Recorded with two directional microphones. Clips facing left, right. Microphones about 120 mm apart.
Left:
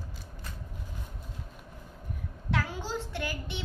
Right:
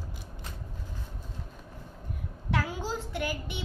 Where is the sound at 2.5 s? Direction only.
10° right (ahead or behind).